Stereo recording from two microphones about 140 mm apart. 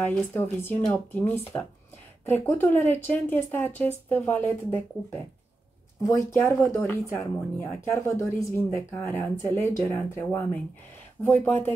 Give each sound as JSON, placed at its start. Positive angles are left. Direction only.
{"t": 0.0, "sound": "speech", "side_deg": 15}